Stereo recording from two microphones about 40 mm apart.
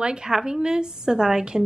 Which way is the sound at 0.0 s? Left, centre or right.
Right.